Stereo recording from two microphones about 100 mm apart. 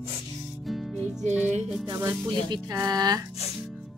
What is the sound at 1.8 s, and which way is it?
Speech, 45° right (ahead or behind).